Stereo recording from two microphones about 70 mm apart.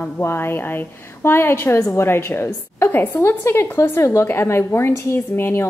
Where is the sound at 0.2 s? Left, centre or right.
Left.